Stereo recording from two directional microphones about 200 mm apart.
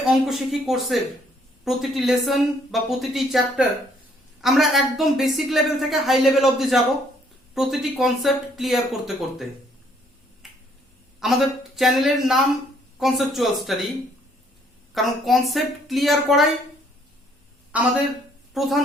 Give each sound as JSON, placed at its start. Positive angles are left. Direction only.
{"t": 0.1, "sound": "speech", "side_deg": 0}
{"t": 11.2, "sound": "speech", "side_deg": 0}
{"t": 14.9, "sound": "speech", "side_deg": 0}
{"t": 17.7, "sound": "a woman's voice", "side_deg": -5}